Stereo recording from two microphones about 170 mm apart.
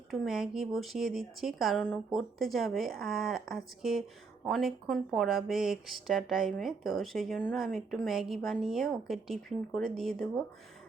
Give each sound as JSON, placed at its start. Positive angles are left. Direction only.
{"t": 0.1, "sound": "speech", "side_deg": -5}